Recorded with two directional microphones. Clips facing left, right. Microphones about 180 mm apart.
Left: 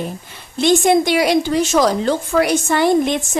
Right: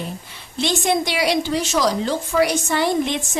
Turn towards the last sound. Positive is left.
turn(degrees=50)  # may be behind; listen again after turning